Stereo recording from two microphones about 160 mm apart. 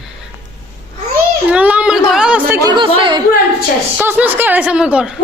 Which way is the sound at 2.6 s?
30° right (ahead or behind).